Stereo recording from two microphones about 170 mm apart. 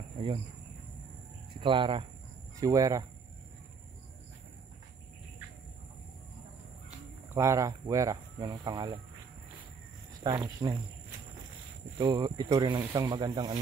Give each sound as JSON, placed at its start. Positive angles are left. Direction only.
{"t": 1.6, "sound": "speech", "side_deg": -30}
{"t": 7.2, "sound": "speech", "side_deg": -15}
{"t": 10.2, "sound": "speech", "side_deg": -25}